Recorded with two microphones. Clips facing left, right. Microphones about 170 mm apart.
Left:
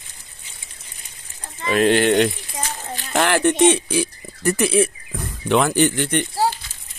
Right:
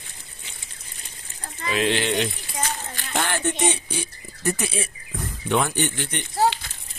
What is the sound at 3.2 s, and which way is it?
Speech, 90° left.